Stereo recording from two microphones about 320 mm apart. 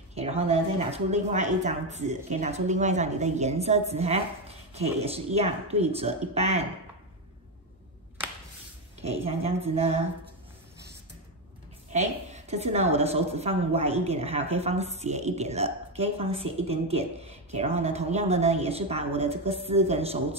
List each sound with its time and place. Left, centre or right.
0.1 s a woman's voice: centre
9.0 s a woman's voice: centre
11.9 s a woman's voice: right